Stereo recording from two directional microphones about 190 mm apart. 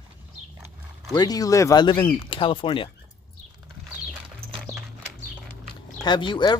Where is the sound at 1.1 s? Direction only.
20° left (ahead or behind).